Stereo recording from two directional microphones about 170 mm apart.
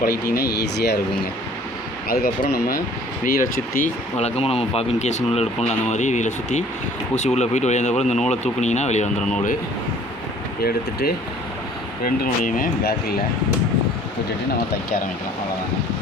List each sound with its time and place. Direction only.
0.0 s speech: 65° left (ahead or behind)
2.0 s speech: 60° left (ahead or behind)
4.2 s speech: 35° left (ahead or behind)
10.6 s speech: 65° left (ahead or behind)